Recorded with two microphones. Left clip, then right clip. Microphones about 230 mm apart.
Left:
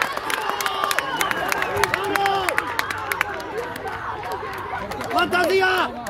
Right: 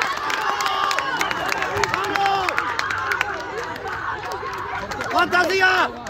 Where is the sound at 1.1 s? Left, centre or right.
Left.